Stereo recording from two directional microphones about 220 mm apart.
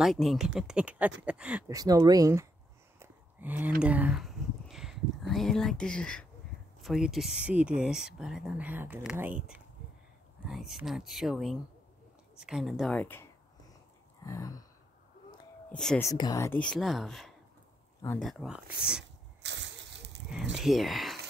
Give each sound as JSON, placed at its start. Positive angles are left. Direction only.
{"t": 0.0, "sound": "speech", "side_deg": 0}
{"t": 1.8, "sound": "speech", "side_deg": -15}
{"t": 3.0, "sound": "a sound", "side_deg": -10}
{"t": 5.3, "sound": "speech", "side_deg": 0}
{"t": 14.2, "sound": "gasp", "side_deg": 15}
{"t": 15.7, "sound": "speech", "side_deg": 5}
{"t": 16.1, "sound": "speech", "side_deg": 15}
{"t": 19.4, "sound": "slosh", "side_deg": -55}
{"t": 20.5, "sound": "speech", "side_deg": 0}